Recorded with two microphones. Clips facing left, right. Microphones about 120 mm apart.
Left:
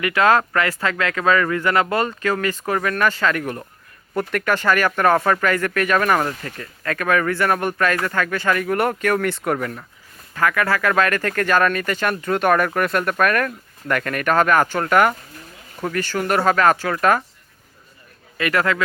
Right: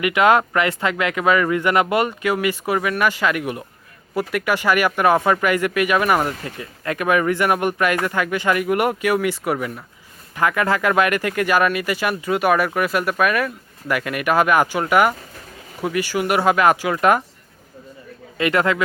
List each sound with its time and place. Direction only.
0.0 s speech: 20° right (ahead or behind)
10.3 s speech: 20° right (ahead or behind)
18.3 s speech: 20° right (ahead or behind)